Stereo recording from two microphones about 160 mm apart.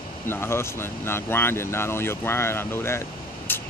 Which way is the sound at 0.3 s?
15° left (ahead or behind).